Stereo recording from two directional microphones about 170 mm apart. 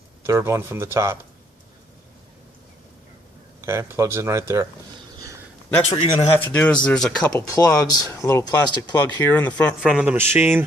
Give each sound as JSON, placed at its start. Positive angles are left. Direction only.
{"t": 0.3, "sound": "speech", "side_deg": -15}
{"t": 3.6, "sound": "speech", "side_deg": -15}
{"t": 5.9, "sound": "speech", "side_deg": 35}
{"t": 6.5, "sound": "speech", "side_deg": 5}
{"t": 7.5, "sound": "speech", "side_deg": 20}
{"t": 9.3, "sound": "speech", "side_deg": 10}
{"t": 9.8, "sound": "speech", "side_deg": -5}